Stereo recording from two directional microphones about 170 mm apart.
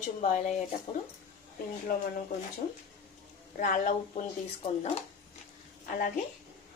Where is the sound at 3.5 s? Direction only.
50° left (ahead or behind).